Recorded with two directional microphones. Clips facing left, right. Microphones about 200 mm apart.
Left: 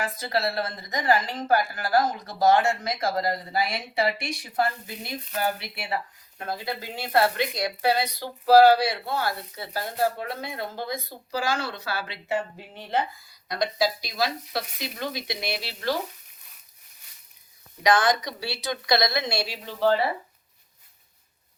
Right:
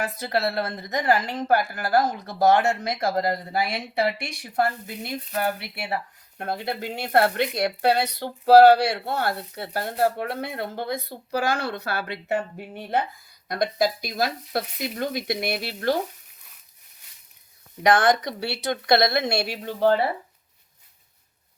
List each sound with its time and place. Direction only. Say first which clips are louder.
0.0 s speech: right 2 dB; 65° right (ahead or behind)
17.8 s speech: right 3 dB; 60° right (ahead or behind)